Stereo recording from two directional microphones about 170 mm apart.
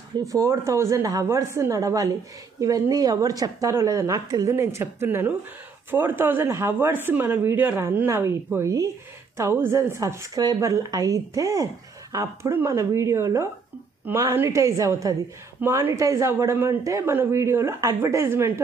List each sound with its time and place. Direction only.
0.2 s speech: 20° right (ahead or behind)